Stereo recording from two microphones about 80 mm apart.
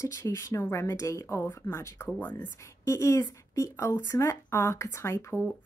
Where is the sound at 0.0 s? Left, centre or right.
Left.